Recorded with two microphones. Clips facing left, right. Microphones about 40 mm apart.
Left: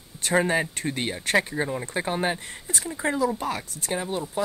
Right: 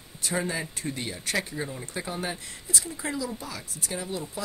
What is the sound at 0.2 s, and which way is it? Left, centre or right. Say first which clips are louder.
Speech: left 7 dB; left.